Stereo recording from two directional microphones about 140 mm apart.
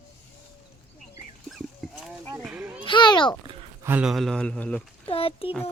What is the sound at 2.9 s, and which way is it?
Speech, 35° left (ahead or behind).